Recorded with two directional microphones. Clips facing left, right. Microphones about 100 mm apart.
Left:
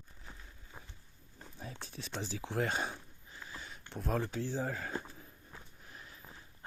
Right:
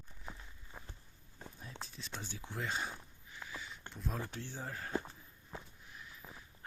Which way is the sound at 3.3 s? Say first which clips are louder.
Right 1 dB; 40° left (ahead or behind).